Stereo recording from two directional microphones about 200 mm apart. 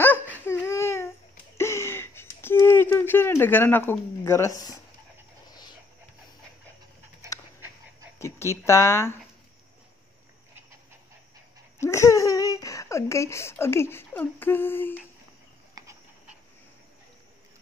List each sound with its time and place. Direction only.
0.0 s a sound: 10° left (ahead or behind)
8.2 s speech: 15° left (ahead or behind)
11.8 s speech: 15° left (ahead or behind)